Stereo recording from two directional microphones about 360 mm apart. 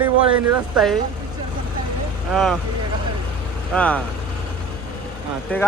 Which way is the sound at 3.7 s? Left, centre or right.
Centre.